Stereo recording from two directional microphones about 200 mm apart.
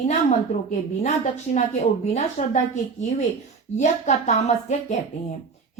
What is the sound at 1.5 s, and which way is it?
A woman's voice, 35° left (ahead or behind).